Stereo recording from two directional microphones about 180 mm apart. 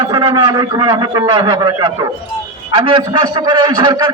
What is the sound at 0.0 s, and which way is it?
A man's voice, 25° right (ahead or behind).